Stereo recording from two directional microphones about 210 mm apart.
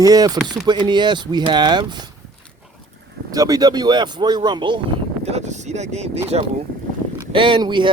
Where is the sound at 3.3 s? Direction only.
15° right (ahead or behind).